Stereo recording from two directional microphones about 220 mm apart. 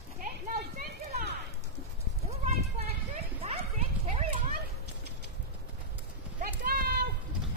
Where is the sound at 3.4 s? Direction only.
30° right (ahead or behind).